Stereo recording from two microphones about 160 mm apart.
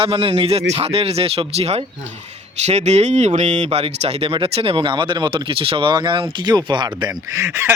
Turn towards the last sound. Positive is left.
turn(degrees=-15)  # may be behind; listen again after turning